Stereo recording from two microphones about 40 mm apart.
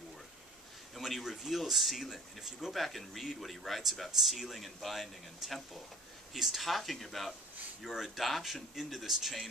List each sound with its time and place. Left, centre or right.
0.9 s a man's voice: centre